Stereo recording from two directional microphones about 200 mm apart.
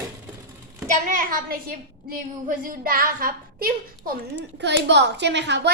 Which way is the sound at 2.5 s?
45° right (ahead or behind).